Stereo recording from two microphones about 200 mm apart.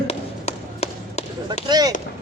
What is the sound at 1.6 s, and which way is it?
Speech, 20° right (ahead or behind).